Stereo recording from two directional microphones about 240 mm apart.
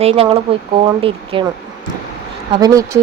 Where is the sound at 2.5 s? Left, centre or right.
Centre.